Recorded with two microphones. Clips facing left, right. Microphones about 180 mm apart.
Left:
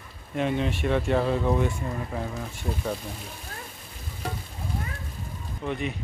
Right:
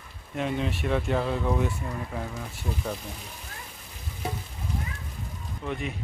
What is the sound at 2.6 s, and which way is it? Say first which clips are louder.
Speech: left 2 dB; 45° left (ahead or behind).